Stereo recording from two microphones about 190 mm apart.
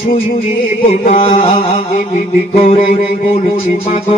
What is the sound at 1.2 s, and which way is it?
Music, 30° left (ahead or behind).